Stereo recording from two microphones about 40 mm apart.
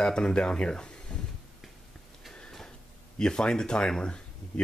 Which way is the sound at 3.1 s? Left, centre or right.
Centre.